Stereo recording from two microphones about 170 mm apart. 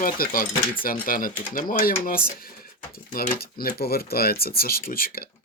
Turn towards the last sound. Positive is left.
turn(degrees=60)  # may be behind; listen again after turning